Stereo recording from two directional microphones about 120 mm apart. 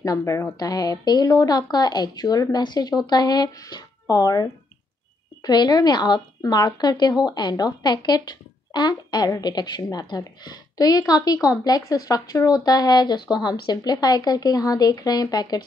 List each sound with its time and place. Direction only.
0.0 s a child's voice: 25° left (ahead or behind)